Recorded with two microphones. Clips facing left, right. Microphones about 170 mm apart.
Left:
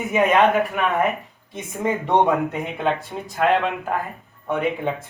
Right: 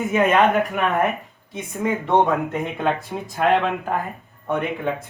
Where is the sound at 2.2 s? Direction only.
15° left (ahead or behind).